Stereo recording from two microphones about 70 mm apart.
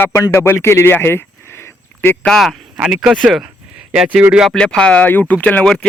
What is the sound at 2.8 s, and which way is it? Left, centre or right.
Speech, centre.